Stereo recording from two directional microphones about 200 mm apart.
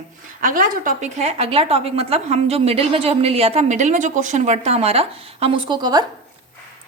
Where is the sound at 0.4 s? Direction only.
45° right (ahead or behind); by 6.1 s 20° right (ahead or behind).